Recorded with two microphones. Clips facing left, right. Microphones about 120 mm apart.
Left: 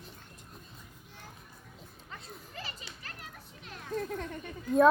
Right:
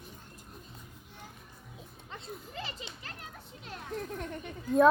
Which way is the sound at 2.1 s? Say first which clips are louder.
Right 4 dB; 25° right (ahead or behind).